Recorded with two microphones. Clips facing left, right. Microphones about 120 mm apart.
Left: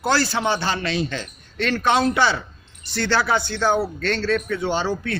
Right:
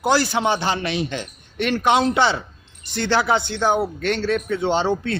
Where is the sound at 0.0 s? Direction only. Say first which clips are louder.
Right 2 dB; 15° right (ahead or behind).